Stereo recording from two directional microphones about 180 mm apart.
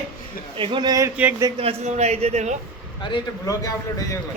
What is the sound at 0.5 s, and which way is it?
Speech, 30° right (ahead or behind).